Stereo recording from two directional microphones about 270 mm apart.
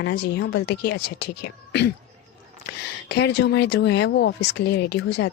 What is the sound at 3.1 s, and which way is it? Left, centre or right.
Speech, left.